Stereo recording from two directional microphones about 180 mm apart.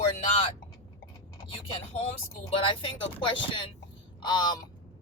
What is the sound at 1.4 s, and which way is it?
Speech, 30° left (ahead or behind).